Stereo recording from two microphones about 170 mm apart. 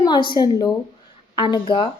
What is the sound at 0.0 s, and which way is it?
A woman's voice, 25° left (ahead or behind).